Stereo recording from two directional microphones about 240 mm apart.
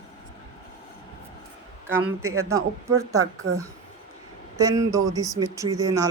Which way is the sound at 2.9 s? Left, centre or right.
Centre.